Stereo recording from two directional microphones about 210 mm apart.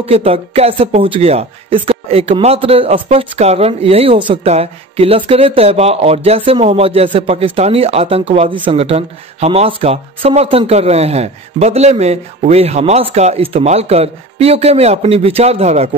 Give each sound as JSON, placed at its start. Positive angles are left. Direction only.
{"t": 0.0, "sound": "speech", "side_deg": -30}